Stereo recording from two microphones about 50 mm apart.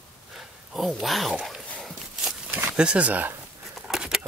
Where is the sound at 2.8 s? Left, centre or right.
Right.